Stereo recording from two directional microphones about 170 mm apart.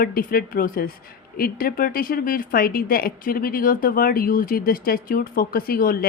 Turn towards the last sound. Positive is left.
turn(degrees=60)  # may be behind; listen again after turning